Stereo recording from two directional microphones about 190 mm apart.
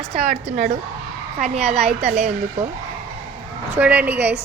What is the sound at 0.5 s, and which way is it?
A woman's voice, 40° right (ahead or behind).